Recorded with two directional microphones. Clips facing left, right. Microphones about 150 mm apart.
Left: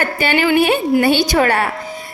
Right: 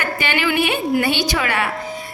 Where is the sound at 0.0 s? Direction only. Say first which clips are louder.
Left 5 dB; 40° left (ahead or behind).